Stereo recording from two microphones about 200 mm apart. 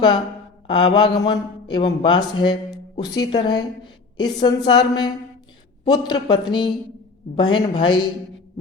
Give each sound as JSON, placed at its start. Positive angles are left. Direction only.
{"t": 0.7, "sound": "a woman's voice", "side_deg": 25}